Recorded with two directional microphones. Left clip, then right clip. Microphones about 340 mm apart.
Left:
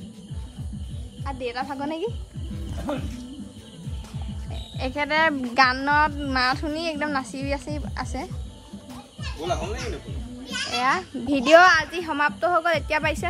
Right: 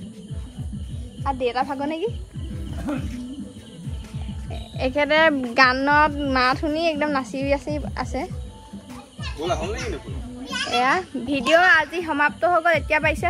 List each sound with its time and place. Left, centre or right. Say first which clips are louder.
1.2 s speech: right 7 dB; centre
4.7 s speech: right 4 dB; centre
9.2 s speech: right 3 dB; centre
10.5 s a child's voice: right 3 dB; centre
11.2 s a child's voice: left 3 dB; centre
11.7 s speech: right 3 dB; centre